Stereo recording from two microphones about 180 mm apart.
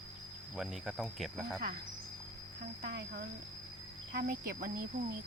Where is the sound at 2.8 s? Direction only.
65° right (ahead or behind).